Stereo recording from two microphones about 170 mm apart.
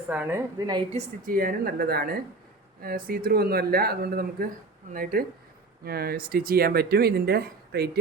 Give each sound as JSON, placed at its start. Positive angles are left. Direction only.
{"t": 0.1, "sound": "a woman's voice", "side_deg": -10}
{"t": 0.9, "sound": "speech", "side_deg": -55}